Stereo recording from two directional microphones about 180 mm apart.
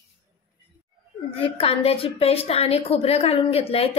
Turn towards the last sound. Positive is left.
turn(degrees=35)  # may be behind; listen again after turning